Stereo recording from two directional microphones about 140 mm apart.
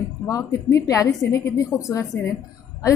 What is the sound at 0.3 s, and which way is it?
A woman's voice, 25° left (ahead or behind).